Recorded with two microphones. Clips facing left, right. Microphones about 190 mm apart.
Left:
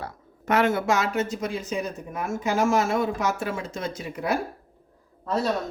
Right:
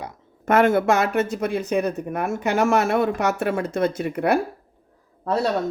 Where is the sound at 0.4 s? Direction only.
50° right (ahead or behind).